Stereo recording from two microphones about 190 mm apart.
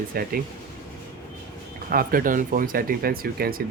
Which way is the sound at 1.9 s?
50° right (ahead or behind).